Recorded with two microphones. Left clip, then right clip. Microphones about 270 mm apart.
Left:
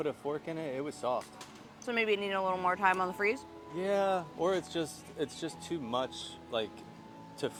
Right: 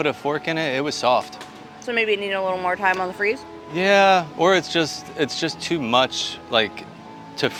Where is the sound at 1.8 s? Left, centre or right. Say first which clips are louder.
Right 10 dB; left.